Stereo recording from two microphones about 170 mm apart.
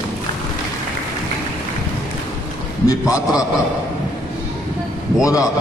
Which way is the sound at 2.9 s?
20° left (ahead or behind).